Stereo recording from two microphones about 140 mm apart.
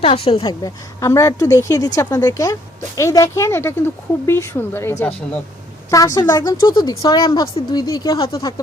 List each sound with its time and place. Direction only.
0.0 s speech: 45° left (ahead or behind)
0.6 s speech: 20° left (ahead or behind)